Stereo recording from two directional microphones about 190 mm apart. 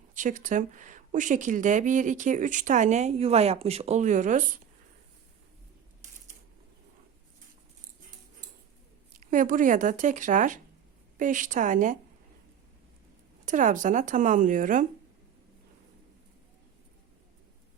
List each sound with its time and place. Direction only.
0.1 s speech: 40° right (ahead or behind)
9.1 s speech: 45° right (ahead or behind)
13.4 s speech: 40° right (ahead or behind)